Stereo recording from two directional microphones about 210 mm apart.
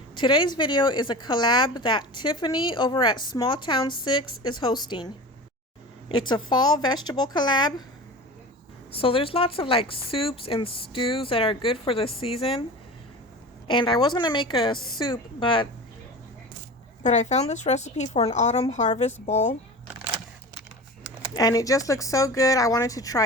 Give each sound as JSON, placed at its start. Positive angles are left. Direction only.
{"t": 0.2, "sound": "a woman's voice", "side_deg": 20}
{"t": 8.9, "sound": "a woman's voice", "side_deg": 25}
{"t": 13.7, "sound": "a woman's voice", "side_deg": 20}
{"t": 17.0, "sound": "a woman's voice", "side_deg": 35}
{"t": 21.3, "sound": "speech", "side_deg": 15}